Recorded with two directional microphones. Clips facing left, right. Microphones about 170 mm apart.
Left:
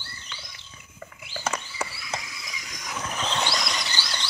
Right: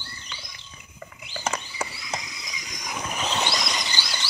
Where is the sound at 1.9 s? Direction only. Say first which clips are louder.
Right 1 dB; 20° right (ahead or behind).